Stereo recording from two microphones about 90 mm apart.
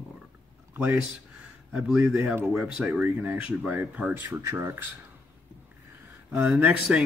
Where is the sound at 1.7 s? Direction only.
10° right (ahead or behind).